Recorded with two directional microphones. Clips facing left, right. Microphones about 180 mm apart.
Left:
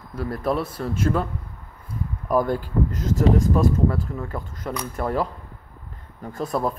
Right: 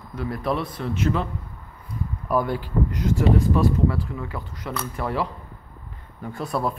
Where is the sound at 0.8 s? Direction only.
45° left (ahead or behind).